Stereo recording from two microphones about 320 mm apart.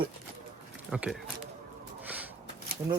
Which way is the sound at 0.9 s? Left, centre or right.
Centre.